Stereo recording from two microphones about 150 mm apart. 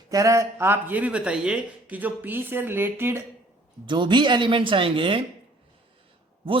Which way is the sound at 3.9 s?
30° right (ahead or behind).